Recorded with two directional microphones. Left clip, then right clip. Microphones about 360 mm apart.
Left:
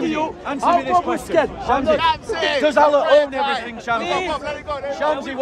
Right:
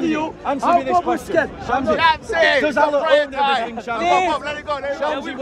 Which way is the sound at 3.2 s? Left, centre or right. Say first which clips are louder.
Right 2 dB; centre.